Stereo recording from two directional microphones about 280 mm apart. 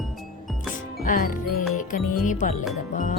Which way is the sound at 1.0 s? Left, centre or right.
Left.